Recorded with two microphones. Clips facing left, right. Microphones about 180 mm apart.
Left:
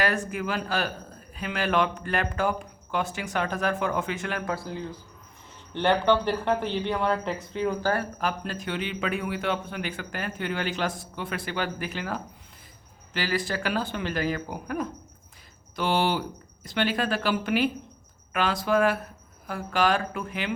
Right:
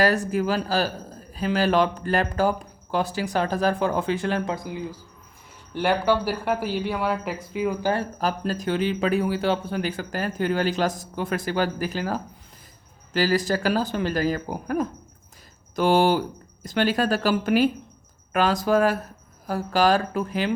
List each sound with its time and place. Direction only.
0.0 s a man's voice: 35° right (ahead or behind)
4.5 s speech: 15° right (ahead or behind)
8.2 s a man's voice: 35° right (ahead or behind)